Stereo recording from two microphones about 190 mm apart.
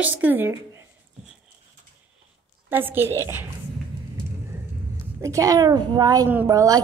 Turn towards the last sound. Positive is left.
turn(degrees=-15)  # may be behind; listen again after turning